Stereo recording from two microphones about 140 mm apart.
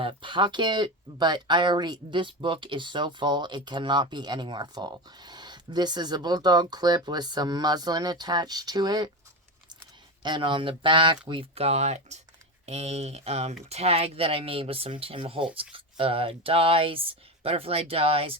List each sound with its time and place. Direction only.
0.0 s speech: 40° right (ahead or behind)
10.2 s speech: 35° right (ahead or behind)